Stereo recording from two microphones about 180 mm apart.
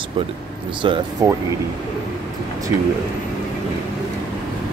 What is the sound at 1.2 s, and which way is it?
Speech, 20° right (ahead or behind).